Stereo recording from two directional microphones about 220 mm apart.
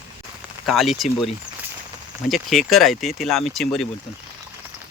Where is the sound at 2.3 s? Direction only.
Centre (ahead or behind).